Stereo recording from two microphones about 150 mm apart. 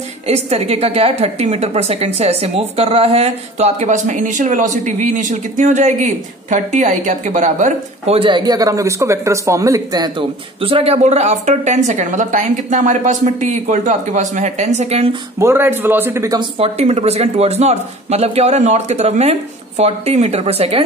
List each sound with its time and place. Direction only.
0.3 s a woman's voice: 45° right (ahead or behind)
8.2 s a woman's voice: 30° right (ahead or behind); by 15.0 s 45° right (ahead or behind)
15.3 s speech: 15° right (ahead or behind)
16.3 s a woman's voice: 40° right (ahead or behind)